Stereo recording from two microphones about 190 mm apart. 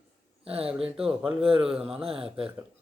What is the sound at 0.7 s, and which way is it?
Mantra, 5° right (ahead or behind).